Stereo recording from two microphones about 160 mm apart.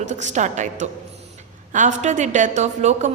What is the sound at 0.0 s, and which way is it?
A woman's voice, 50° right (ahead or behind).